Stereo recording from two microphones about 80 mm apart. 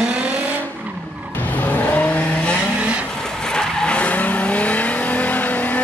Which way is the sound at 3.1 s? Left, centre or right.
Centre.